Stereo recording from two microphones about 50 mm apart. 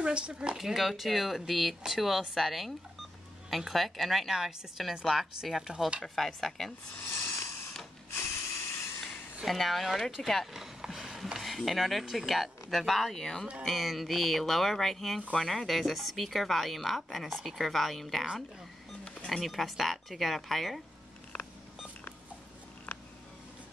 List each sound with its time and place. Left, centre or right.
0.0 s speech: centre
0.6 s speech: centre
5.0 s speech: centre
6.0 s speech: centre
8.1 s snort: left
9.4 s speech: centre
19.2 s speech: centre